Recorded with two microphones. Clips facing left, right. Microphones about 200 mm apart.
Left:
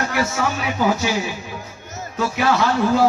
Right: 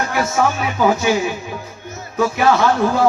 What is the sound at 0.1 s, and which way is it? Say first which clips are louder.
Speech: right 4 dB; 50° right (ahead or behind).